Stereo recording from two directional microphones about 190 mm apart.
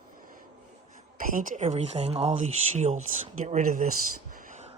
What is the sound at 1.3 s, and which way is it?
Speech, 40° right (ahead or behind).